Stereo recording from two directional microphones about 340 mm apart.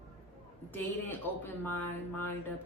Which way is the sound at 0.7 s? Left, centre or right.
Centre.